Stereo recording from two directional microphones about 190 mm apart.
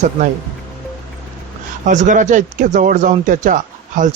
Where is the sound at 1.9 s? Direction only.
40° right (ahead or behind).